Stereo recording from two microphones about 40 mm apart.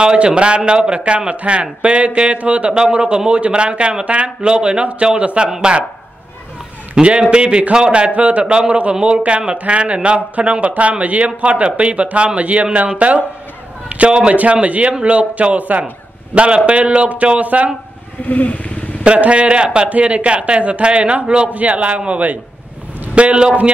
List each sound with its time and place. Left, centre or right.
0.0 s a man's voice: right
2.7 s a man's voice: right
7.0 s a man's voice: right
13.8 s a sound: right
14.5 s speech: right
16.3 s speech: right
18.2 s speech: left
19.0 s a man's voice: right
19.9 s a man's voice: right